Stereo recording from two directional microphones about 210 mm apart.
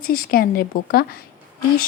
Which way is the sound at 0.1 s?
45° left (ahead or behind).